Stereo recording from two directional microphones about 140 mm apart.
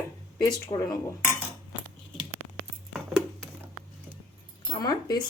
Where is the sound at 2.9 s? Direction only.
5° right (ahead or behind).